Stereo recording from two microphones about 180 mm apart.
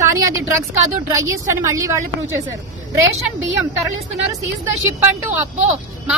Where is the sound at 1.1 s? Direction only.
15° right (ahead or behind).